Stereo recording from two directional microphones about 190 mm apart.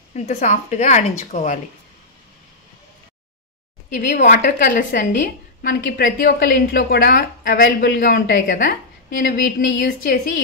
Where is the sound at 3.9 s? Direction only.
40° left (ahead or behind).